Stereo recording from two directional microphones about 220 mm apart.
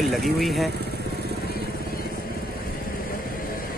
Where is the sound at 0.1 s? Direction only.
Centre (ahead or behind).